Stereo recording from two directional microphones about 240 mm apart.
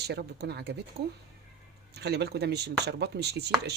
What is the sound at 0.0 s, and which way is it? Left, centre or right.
Speech, right.